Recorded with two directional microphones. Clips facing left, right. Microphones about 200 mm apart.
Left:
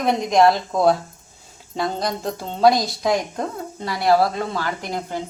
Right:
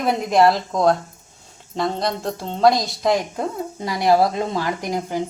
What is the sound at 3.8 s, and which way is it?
A woman's voice, 15° right (ahead or behind).